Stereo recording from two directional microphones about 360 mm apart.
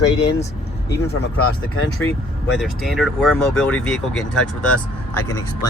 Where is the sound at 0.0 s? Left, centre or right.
Left.